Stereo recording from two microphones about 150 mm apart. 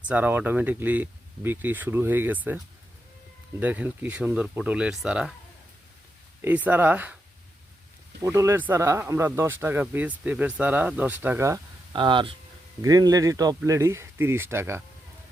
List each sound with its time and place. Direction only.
0.1 s speech: 10° right (ahead or behind)
3.6 s speech: 10° right (ahead or behind)
6.4 s speech: 10° right (ahead or behind)
8.2 s speech: 20° right (ahead or behind)
11.9 s speech: 35° right (ahead or behind)
12.8 s a man's voice: 25° right (ahead or behind)